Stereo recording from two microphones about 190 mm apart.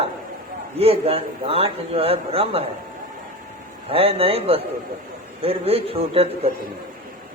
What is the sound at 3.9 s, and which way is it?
A man's voice, 30° right (ahead or behind).